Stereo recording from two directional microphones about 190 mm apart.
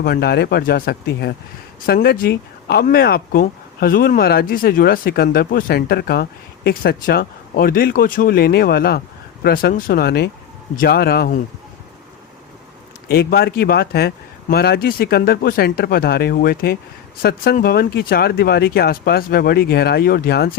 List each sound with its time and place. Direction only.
0.0 s speech: 55° left (ahead or behind)
13.1 s speech: 55° left (ahead or behind)